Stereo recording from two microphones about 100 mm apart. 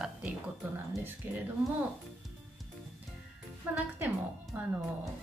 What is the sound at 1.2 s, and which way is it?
Speech, 20° right (ahead or behind).